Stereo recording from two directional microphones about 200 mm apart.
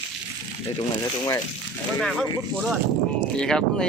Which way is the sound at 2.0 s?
Centre (ahead or behind).